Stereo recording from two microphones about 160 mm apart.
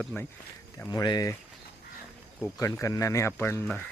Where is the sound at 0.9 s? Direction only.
25° left (ahead or behind).